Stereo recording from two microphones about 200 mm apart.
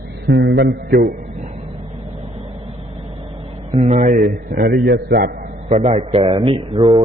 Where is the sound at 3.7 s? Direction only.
35° right (ahead or behind).